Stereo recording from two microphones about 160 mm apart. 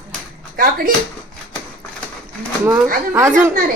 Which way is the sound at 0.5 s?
65° right (ahead or behind).